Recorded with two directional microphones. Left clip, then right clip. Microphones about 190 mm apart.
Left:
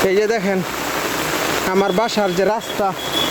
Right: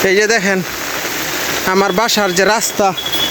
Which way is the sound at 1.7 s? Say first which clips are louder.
Right 6 dB; 5° right (ahead or behind).